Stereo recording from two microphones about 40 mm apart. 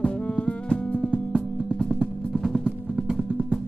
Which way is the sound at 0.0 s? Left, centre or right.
Left.